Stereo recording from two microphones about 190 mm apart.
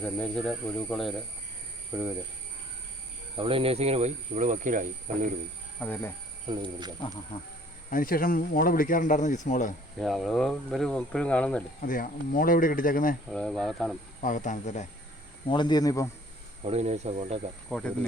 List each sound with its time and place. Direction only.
0.0 s speech: 5° left (ahead or behind)
1.9 s speech: 10° right (ahead or behind)
3.3 s speech: 30° right (ahead or behind)
5.8 s speech: 10° left (ahead or behind)
6.5 s speech: 25° right (ahead or behind)
7.9 s speech: 45° left (ahead or behind)
10.0 s speech: centre (ahead or behind)
11.9 s speech: 45° left (ahead or behind)
13.3 s speech: 5° left (ahead or behind)
14.2 s speech: 45° left (ahead or behind)
15.4 s speech: 25° left (ahead or behind)
16.6 s speech: 35° right (ahead or behind)